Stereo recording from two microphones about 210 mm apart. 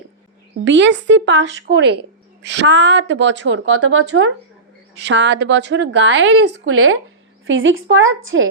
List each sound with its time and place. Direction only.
0.6 s a woman's voice: 60° right (ahead or behind); by 4.3 s 80° right
5.0 s a woman's voice: 55° right (ahead or behind)